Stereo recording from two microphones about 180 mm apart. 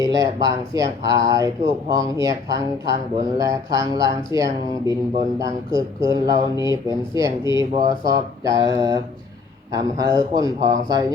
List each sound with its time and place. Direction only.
0.0 s a man's voice: 20° right (ahead or behind)
6.0 s speech: 30° left (ahead or behind)
7.2 s a man's voice: 15° right (ahead or behind)